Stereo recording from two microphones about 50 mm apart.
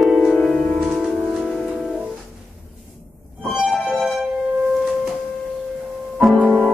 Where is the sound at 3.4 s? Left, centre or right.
Centre.